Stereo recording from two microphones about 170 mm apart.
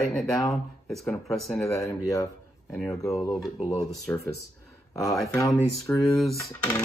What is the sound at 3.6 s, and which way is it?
Speech, 40° left (ahead or behind).